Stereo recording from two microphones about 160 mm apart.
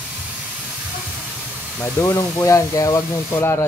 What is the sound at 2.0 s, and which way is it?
Speech, 15° left (ahead or behind).